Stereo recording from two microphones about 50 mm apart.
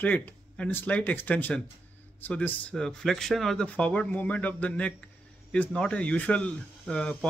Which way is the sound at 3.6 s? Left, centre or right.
Left.